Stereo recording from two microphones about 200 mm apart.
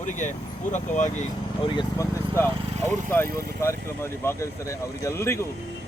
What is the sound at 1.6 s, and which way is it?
Speech, 20° left (ahead or behind).